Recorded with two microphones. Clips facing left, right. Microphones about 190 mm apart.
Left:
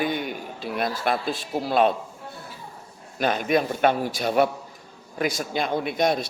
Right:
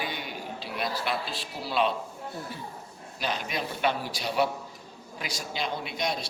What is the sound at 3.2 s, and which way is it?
Speech, 50° left (ahead or behind).